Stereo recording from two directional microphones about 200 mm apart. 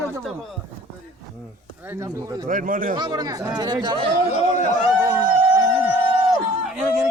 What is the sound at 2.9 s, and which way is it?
Speech, 20° right (ahead or behind).